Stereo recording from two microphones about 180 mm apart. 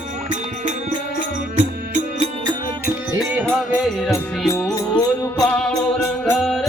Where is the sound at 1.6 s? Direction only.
35° right (ahead or behind).